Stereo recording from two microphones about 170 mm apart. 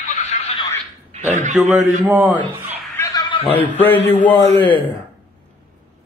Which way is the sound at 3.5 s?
10° left (ahead or behind).